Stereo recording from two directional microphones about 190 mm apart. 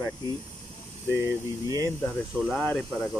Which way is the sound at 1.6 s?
15° right (ahead or behind).